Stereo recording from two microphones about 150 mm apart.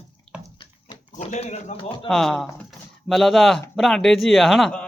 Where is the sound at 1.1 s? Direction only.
50° left (ahead or behind).